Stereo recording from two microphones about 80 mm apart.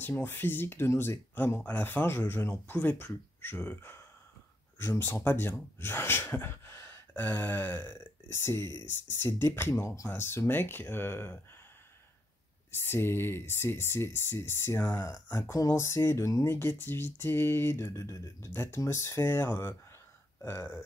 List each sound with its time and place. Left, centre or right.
0.0 s speech: left
12.8 s speech: left
15.5 s speech: left